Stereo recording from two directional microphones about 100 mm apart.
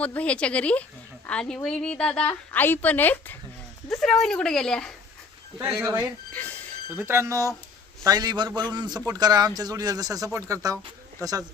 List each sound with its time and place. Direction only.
0.0 s a woman's voice: 15° left (ahead or behind)
3.8 s a woman's voice: 5° left (ahead or behind)
5.8 s speech: 30° right (ahead or behind)
6.3 s a sound: 15° left (ahead or behind)
7.0 s speech: 25° right (ahead or behind)
8.0 s a man's voice: 40° right (ahead or behind)